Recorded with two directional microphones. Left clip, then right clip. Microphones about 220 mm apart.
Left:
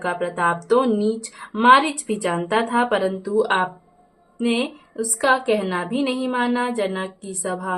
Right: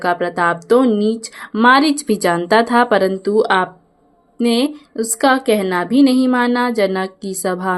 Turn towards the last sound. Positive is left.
turn(degrees=-35)  # may be behind; listen again after turning